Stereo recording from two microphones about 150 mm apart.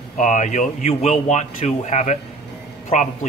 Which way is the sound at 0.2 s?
55° left (ahead or behind).